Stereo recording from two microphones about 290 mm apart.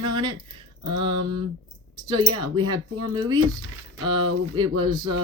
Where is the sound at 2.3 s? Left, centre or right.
Centre.